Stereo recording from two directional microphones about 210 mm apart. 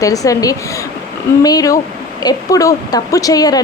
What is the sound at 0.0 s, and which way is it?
A woman's voice, 15° left (ahead or behind).